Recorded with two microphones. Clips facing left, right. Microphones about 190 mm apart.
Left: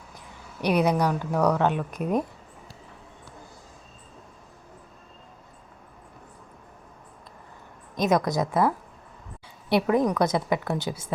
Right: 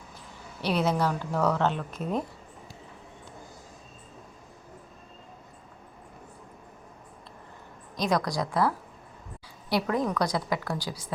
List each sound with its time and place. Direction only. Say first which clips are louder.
0.6 s a woman's voice: left 4 dB; 15° left (ahead or behind)
7.9 s a woman's voice: left 4 dB; 20° left (ahead or behind)